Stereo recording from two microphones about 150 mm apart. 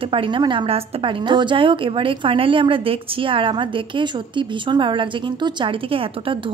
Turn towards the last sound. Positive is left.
turn(degrees=-35)  # may be behind; listen again after turning